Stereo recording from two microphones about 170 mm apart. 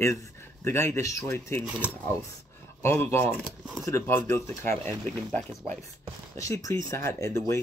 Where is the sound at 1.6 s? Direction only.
10° right (ahead or behind).